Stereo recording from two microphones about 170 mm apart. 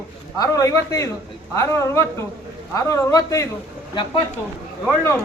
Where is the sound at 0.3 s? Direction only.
20° left (ahead or behind).